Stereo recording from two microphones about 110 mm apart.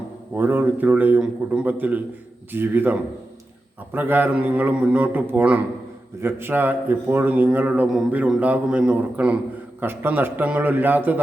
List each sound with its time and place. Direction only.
0.3 s a man's voice: 20° right (ahead or behind)